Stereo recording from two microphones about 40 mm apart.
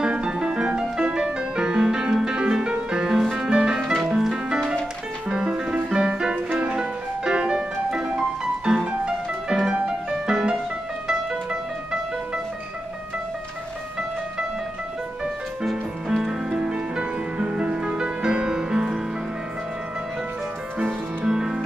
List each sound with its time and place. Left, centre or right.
0.0 s music: centre
3.1 s music: centre
3.4 s music: right
15.6 s music: centre
16.4 s music: right
18.5 s music: centre
21.3 s music: centre